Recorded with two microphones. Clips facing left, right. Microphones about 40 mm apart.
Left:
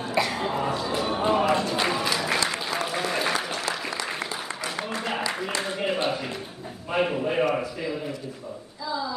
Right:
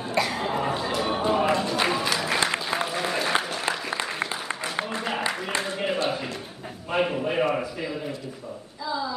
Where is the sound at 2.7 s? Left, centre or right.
Centre.